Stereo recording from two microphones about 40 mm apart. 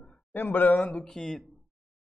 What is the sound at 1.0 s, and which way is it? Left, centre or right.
Speech, centre.